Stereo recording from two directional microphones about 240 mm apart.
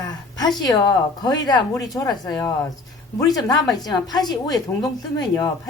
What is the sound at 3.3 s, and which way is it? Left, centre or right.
Speech, centre.